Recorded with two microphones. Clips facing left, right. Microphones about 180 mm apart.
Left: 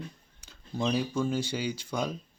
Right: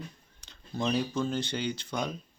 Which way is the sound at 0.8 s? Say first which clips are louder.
Left 1 dB; 10° left (ahead or behind).